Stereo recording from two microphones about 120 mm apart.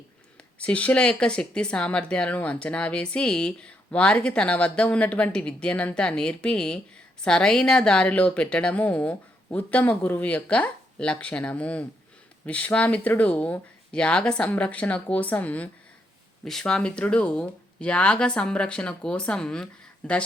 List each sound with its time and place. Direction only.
0.6 s speech: 10° left (ahead or behind)